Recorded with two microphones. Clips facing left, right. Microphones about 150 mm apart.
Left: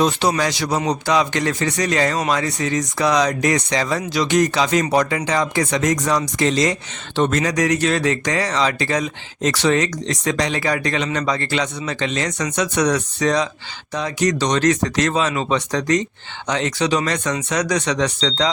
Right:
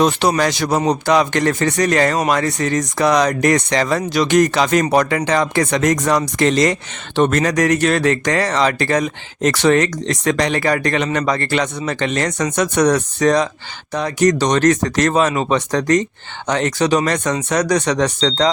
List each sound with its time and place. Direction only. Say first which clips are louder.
0.0 s speech: right 3 dB; 60° right (ahead or behind); by 18.5 s 45° right (ahead or behind)